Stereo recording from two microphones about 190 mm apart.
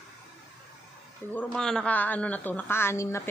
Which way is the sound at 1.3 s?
5° left (ahead or behind).